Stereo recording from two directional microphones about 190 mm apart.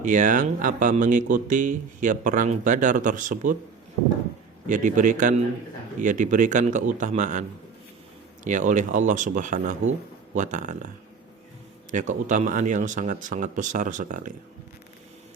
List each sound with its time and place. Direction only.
0.0 s speech: 45° right (ahead or behind)
4.6 s speech: 40° right (ahead or behind)
8.4 s speech: 40° right (ahead or behind)